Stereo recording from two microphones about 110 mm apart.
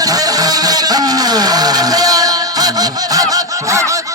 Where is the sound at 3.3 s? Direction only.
30° right (ahead or behind).